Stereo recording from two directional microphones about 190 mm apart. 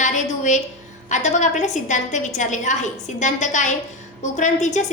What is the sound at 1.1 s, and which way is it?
A woman's voice, 40° left (ahead or behind).